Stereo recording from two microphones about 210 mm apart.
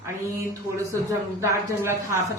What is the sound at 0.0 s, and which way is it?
A woman's voice, 15° right (ahead or behind).